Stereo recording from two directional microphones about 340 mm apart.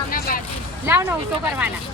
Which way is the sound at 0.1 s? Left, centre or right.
Left.